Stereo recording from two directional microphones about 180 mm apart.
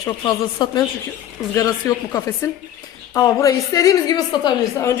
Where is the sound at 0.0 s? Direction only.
25° left (ahead or behind).